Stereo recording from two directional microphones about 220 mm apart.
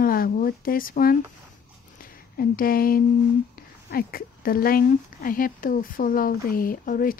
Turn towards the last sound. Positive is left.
turn(degrees=40)  # may be behind; listen again after turning